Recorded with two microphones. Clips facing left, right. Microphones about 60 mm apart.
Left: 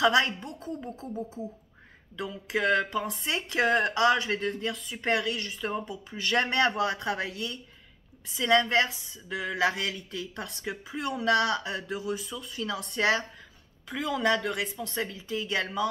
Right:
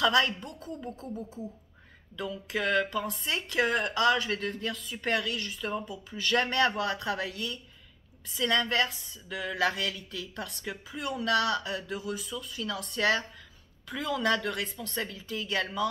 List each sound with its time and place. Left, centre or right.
0.0 s speech: centre
2.1 s speech: centre
11.1 s speech: left
13.8 s speech: centre